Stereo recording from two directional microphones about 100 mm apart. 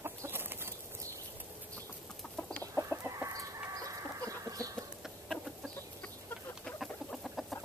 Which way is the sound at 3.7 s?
35° right (ahead or behind).